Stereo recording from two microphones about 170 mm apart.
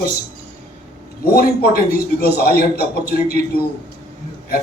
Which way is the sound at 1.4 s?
60° left (ahead or behind).